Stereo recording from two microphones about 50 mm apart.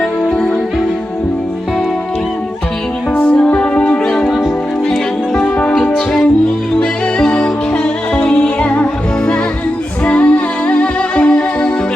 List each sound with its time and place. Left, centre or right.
3.2 s music: left
4.3 s music: centre
4.9 s music: centre